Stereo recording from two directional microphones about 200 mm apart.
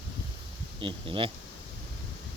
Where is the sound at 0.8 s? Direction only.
25° right (ahead or behind).